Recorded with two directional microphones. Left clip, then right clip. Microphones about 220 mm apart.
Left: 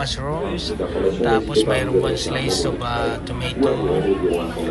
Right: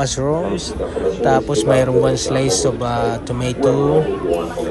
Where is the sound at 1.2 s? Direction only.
30° right (ahead or behind).